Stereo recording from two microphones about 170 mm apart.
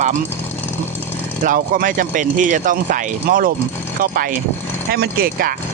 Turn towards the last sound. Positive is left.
turn(degrees=-60)  # may be behind; listen again after turning